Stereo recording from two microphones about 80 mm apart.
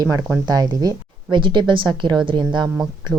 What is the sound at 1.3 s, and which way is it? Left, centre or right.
A woman's voice, right.